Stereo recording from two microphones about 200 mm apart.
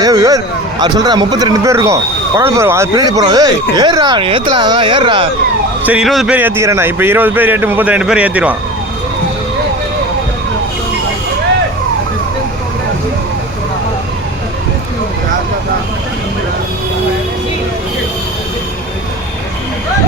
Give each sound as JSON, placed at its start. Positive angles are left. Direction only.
{"t": 0.0, "sound": "speech", "side_deg": -20}
{"t": 5.8, "sound": "a man's voice", "side_deg": -5}